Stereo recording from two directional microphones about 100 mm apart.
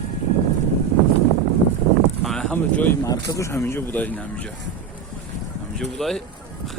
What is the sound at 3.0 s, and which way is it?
Speech, 35° left (ahead or behind).